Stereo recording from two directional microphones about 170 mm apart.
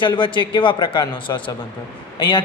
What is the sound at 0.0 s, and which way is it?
A man's voice, 30° left (ahead or behind).